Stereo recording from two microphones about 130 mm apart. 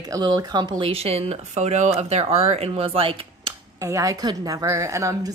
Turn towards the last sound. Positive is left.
turn(degrees=-25)  # may be behind; listen again after turning